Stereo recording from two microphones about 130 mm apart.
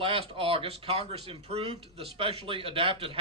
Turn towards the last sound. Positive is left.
turn(degrees=-45)  # may be behind; listen again after turning